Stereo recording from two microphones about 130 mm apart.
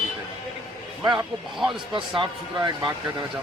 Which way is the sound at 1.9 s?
40° right (ahead or behind).